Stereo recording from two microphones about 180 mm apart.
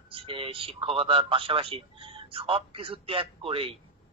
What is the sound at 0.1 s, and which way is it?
A man's voice, 30° right (ahead or behind).